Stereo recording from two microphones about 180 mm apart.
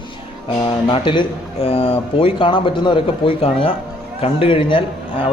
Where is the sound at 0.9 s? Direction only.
30° left (ahead or behind).